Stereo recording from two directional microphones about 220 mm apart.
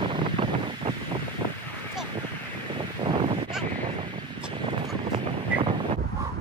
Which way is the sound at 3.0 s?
20° right (ahead or behind).